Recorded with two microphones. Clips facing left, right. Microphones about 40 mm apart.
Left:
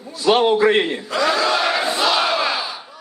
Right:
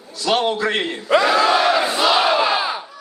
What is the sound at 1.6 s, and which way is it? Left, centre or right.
Crowd, centre.